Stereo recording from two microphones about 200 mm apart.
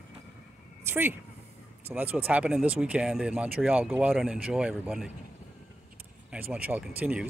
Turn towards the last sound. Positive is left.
turn(degrees=-5)  # may be behind; listen again after turning